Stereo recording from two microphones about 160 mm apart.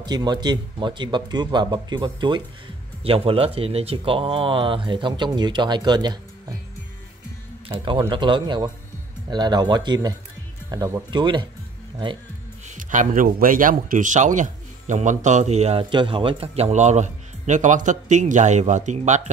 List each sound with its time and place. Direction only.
0.0 s speech: 25° right (ahead or behind)
8.1 s speech: 30° right (ahead or behind)
12.6 s a man's voice: 55° right (ahead or behind)
15.8 s a man's voice: 30° right (ahead or behind); by 19.3 s 50° right (ahead or behind)